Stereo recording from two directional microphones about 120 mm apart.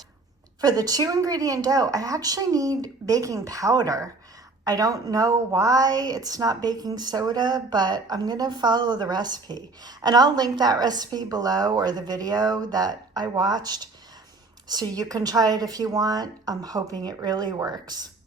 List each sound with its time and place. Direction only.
0.6 s a woman's voice: 30° right (ahead or behind)